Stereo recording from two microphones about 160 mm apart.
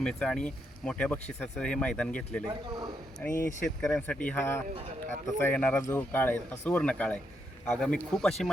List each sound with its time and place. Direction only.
0.0 s speech: 5° left (ahead or behind)
2.5 s a man's voice: 25° right (ahead or behind)
3.2 s speech: 10° left (ahead or behind)